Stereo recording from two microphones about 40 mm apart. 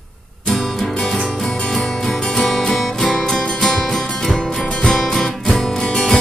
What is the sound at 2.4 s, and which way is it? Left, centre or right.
Music, centre.